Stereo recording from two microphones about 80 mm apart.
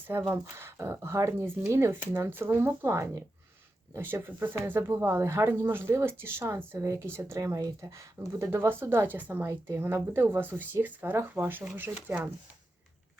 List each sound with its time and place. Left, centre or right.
0.3 s speech: right
3.9 s speech: right
9.5 s speech: right